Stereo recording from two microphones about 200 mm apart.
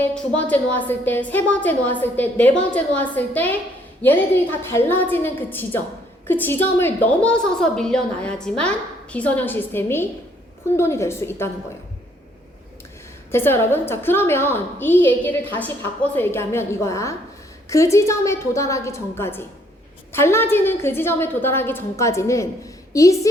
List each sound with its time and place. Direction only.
0.1 s a woman's voice: 5° left (ahead or behind)
4.7 s a woman's voice: 10° left (ahead or behind)
13.3 s a woman's voice: 10° left (ahead or behind)